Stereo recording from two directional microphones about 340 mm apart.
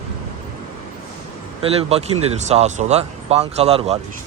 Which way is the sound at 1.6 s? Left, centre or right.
Centre.